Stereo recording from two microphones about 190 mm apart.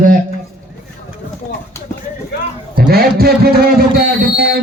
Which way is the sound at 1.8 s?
15° left (ahead or behind).